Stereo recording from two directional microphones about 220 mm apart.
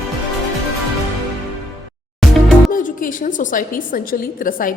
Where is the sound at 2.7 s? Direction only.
40° left (ahead or behind).